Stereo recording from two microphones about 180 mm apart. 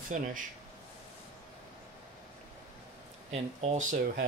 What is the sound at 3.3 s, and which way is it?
Speech, 40° right (ahead or behind).